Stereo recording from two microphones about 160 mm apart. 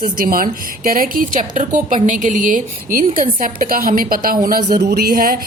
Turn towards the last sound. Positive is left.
turn(degrees=-65)  # may be behind; listen again after turning